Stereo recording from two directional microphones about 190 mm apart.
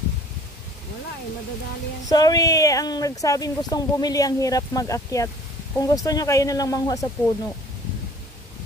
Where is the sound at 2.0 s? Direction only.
20° left (ahead or behind).